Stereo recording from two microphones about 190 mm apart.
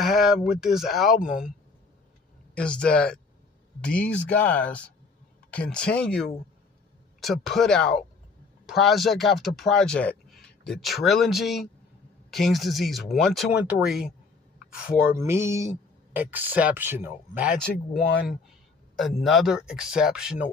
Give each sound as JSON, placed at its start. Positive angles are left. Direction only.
{"t": 0.0, "sound": "speech", "side_deg": 0}
{"t": 2.5, "sound": "speech", "side_deg": 5}
{"t": 15.0, "sound": "speech", "side_deg": -15}
{"t": 18.9, "sound": "speech", "side_deg": 0}